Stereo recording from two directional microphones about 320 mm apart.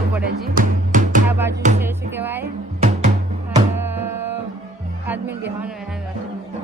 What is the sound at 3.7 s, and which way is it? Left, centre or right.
Music, centre.